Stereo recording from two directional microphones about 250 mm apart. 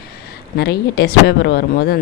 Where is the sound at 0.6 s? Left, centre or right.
Left.